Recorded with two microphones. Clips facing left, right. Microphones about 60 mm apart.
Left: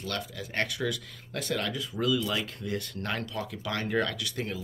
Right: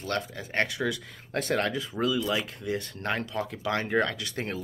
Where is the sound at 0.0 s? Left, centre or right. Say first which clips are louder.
Right 4 dB; right.